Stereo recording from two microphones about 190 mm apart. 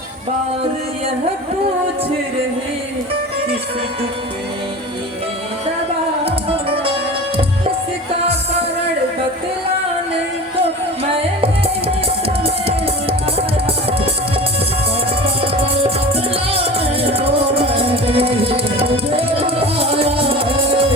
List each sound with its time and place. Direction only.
11.1 s music: 30° right (ahead or behind)
15.2 s music: 30° right (ahead or behind)